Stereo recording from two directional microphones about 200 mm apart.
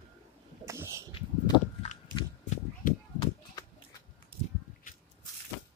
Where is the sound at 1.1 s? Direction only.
30° left (ahead or behind).